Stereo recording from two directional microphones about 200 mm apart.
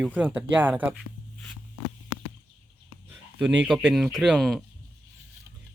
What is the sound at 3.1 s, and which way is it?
Speech, 5° right (ahead or behind).